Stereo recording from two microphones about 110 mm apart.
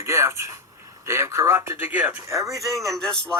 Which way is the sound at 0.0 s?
25° right (ahead or behind).